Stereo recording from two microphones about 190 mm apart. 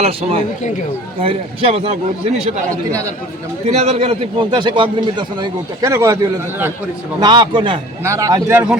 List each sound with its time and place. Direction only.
0.0 s a man's voice: 30° right (ahead or behind)
3.7 s a man's voice: 35° right (ahead or behind); by 6.1 s 15° right (ahead or behind)
7.2 s a man's voice: 25° right (ahead or behind)